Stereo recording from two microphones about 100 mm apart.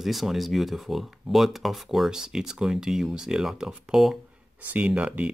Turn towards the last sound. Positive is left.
turn(degrees=-15)  # may be behind; listen again after turning